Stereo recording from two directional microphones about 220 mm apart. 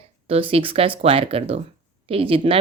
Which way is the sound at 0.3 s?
25° right (ahead or behind).